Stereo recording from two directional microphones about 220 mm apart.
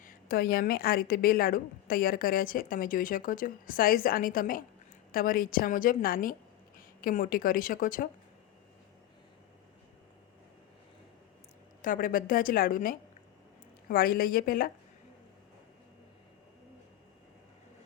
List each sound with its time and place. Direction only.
0.0 s a woman's voice: 40° left (ahead or behind)
11.8 s a woman's voice: 40° left (ahead or behind)